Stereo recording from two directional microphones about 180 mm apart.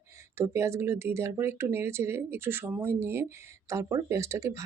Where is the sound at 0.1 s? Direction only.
15° right (ahead or behind).